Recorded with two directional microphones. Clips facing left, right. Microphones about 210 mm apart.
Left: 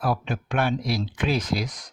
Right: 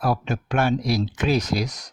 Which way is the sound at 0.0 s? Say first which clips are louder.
Right 2 dB; 40° right (ahead or behind).